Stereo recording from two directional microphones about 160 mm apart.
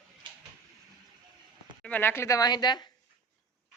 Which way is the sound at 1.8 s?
10° left (ahead or behind).